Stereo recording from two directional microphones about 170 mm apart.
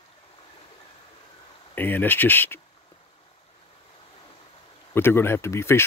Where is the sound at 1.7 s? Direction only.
10° left (ahead or behind).